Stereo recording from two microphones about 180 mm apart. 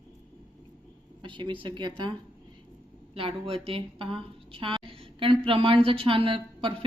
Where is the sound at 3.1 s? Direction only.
30° right (ahead or behind).